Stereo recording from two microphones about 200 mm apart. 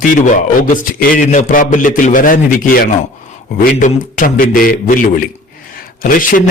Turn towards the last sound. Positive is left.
turn(degrees=45)  # may be behind; listen again after turning